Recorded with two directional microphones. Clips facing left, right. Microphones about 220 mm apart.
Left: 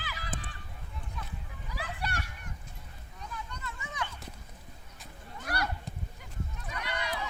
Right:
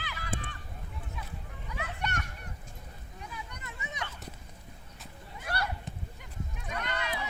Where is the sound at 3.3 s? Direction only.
15° right (ahead or behind).